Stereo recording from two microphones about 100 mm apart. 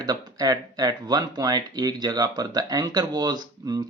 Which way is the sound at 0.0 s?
40° right (ahead or behind).